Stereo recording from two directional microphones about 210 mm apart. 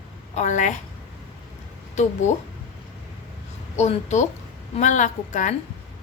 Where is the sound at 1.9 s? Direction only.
35° left (ahead or behind).